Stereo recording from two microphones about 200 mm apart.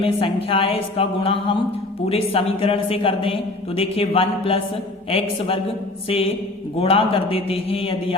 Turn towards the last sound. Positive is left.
turn(degrees=30)  # may be behind; listen again after turning